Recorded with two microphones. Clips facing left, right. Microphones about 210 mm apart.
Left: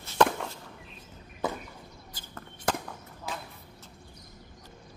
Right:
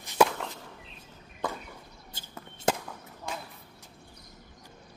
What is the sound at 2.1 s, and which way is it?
Chop, 25° right (ahead or behind).